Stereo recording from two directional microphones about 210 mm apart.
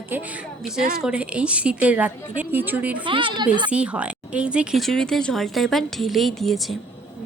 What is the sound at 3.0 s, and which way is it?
Speech, 25° right (ahead or behind).